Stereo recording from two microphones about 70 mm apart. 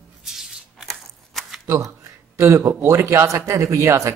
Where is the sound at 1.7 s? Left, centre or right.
Right.